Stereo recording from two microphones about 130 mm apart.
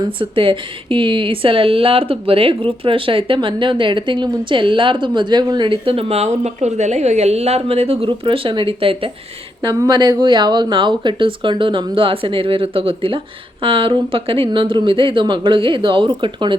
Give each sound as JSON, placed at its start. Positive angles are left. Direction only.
{"t": 0.0, "sound": "speech", "side_deg": -40}